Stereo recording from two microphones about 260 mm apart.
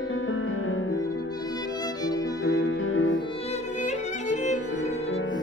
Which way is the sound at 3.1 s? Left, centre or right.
Left.